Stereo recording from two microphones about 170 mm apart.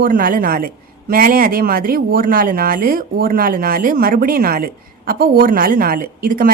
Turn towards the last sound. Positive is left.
turn(degrees=-55)  # may be behind; listen again after turning